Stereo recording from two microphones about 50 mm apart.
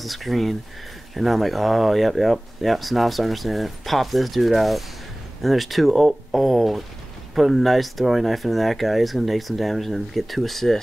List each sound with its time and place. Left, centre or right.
0.0 s speech: centre